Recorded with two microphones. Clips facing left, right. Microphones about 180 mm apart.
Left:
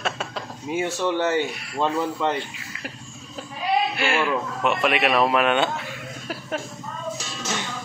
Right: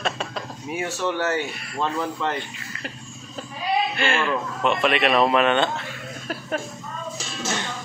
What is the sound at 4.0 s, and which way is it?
Speech, 10° left (ahead or behind).